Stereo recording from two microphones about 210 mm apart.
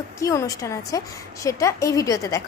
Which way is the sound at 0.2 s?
15° left (ahead or behind).